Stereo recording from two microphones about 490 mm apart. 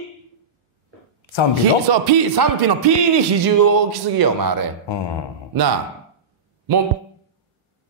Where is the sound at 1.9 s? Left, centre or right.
Right.